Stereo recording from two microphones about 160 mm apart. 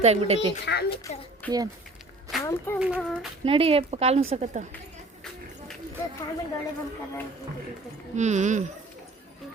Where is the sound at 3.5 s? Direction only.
35° right (ahead or behind).